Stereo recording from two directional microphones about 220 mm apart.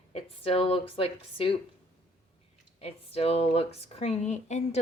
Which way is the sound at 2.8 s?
25° left (ahead or behind).